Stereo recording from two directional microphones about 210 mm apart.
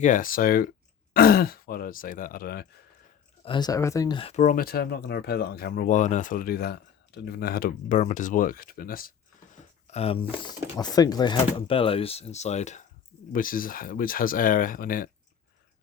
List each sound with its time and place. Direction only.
0.0 s speech: 40° left (ahead or behind)
3.4 s speech: 20° left (ahead or behind); by 9.1 s 45° left (ahead or behind)
9.6 s a sound: 30° left (ahead or behind)
10.8 s speech: 20° left (ahead or behind); by 15.1 s 40° left (ahead or behind)